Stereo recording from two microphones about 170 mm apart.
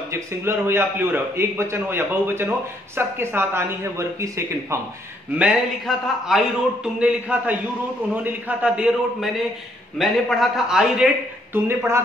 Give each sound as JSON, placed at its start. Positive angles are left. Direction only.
{"t": 0.1, "sound": "a man's voice", "side_deg": -15}
{"t": 5.4, "sound": "a man's voice", "side_deg": -5}
{"t": 11.5, "sound": "a man's voice", "side_deg": -15}